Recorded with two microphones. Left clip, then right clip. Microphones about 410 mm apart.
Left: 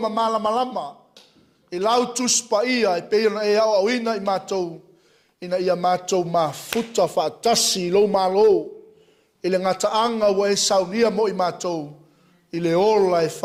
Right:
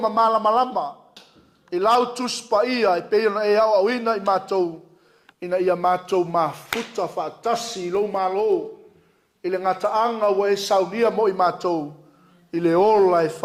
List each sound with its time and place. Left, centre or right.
0.0 s a man's voice: left
6.9 s a man's voice: left